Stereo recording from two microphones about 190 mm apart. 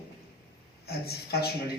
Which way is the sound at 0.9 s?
55° left (ahead or behind).